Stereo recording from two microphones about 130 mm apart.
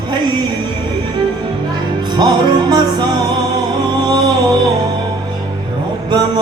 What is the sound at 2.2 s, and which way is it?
Music, 35° right (ahead or behind).